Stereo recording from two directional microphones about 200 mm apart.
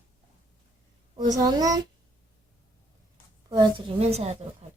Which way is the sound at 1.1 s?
20° right (ahead or behind).